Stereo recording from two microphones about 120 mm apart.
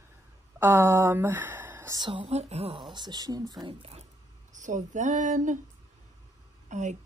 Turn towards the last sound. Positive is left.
turn(degrees=-90)